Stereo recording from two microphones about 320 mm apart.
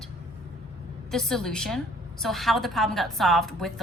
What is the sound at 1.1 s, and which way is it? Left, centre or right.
A woman's voice, centre.